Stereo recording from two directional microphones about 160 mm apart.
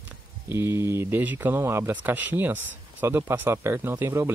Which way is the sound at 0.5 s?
15° right (ahead or behind).